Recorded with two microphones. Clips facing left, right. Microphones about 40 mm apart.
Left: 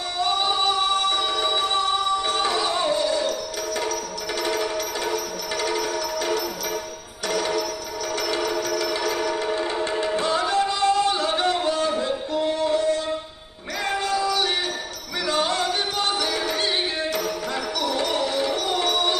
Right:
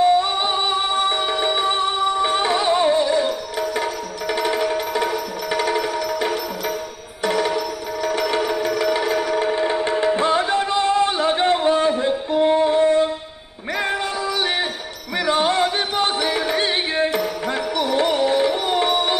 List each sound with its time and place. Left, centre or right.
0.0 s music: right
4.4 s music: right